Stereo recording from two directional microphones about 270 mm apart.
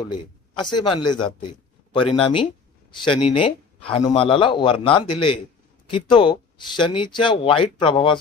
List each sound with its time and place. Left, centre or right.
0.0 s a man's voice: centre